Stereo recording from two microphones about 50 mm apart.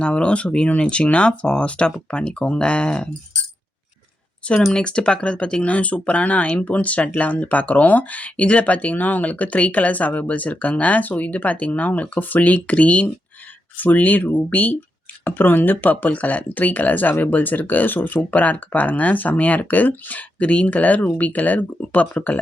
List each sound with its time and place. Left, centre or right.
0.0 s speech: left
4.7 s speech: centre